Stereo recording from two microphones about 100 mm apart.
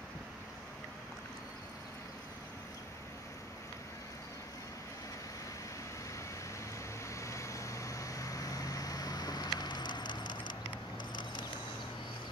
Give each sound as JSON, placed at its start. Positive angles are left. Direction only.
{"t": 7.2, "sound": "vehicle", "side_deg": 30}